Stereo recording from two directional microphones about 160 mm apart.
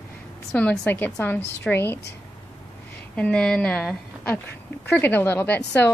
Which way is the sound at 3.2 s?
5° left (ahead or behind).